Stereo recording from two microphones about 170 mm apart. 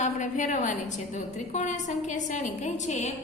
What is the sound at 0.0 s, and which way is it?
A woman's voice, 45° left (ahead or behind).